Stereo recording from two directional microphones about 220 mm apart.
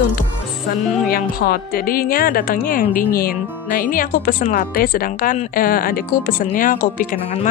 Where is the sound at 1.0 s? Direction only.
45° left (ahead or behind).